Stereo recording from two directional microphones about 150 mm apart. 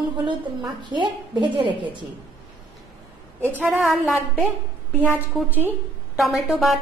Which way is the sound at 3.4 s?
15° right (ahead or behind).